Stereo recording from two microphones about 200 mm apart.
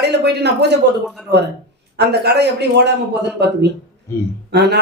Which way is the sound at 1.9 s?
55° right (ahead or behind).